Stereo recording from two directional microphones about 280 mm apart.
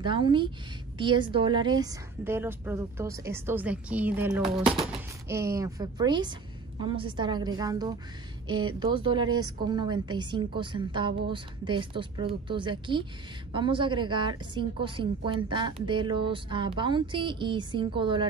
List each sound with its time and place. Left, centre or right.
0.0 s a woman's voice: centre